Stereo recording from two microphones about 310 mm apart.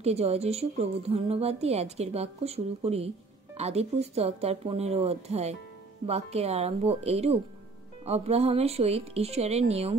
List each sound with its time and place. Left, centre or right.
0.0 s a woman's voice: centre